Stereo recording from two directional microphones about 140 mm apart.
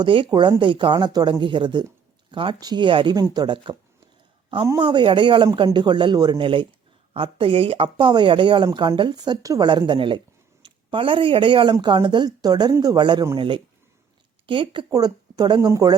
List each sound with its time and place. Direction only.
0.0 s speech: 35° right (ahead or behind)
4.8 s speech: 35° right (ahead or behind)